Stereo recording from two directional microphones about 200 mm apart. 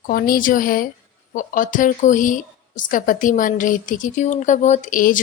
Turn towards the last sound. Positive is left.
turn(degrees=40)  # may be behind; listen again after turning